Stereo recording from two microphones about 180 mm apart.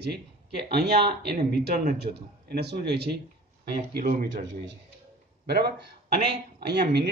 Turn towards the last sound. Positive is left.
turn(degrees=-65)  # may be behind; listen again after turning